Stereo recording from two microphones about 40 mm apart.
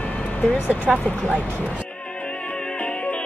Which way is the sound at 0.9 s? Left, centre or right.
Right.